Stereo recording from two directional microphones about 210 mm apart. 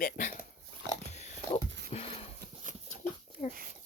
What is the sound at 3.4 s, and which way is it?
Speech, 30° left (ahead or behind).